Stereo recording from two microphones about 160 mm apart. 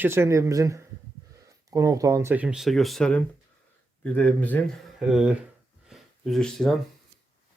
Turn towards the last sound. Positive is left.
turn(degrees=0)  # may be behind; listen again after turning